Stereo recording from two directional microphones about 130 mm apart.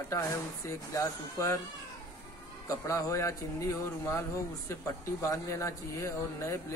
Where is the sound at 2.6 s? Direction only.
25° left (ahead or behind).